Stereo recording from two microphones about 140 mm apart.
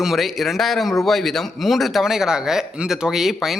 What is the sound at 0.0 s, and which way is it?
A man's voice, centre (ahead or behind).